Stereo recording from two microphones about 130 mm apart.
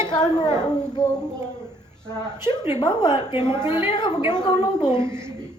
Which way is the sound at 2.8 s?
35° left (ahead or behind).